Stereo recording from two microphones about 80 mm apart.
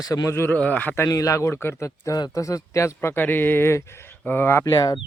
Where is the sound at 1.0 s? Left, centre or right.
Left.